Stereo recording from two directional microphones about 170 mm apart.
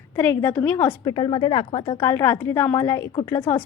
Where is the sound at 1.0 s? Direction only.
25° left (ahead or behind).